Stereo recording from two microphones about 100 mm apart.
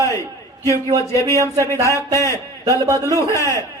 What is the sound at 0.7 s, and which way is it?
A man's voice, 30° left (ahead or behind).